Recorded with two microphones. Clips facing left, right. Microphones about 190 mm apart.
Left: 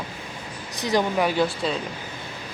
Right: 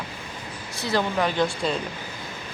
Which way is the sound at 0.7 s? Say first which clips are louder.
Left 2 dB; 15° left (ahead or behind).